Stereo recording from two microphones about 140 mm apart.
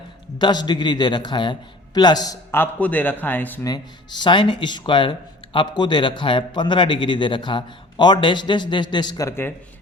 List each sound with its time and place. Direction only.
0.3 s a man's voice: 30° left (ahead or behind); by 3.6 s 15° left (ahead or behind)
3.6 s a man's voice: 30° left (ahead or behind)